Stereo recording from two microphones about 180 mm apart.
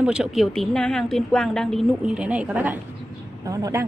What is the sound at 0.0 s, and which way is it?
A woman's voice, 5° right (ahead or behind).